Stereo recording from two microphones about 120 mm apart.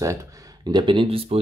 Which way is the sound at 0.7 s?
40° right (ahead or behind).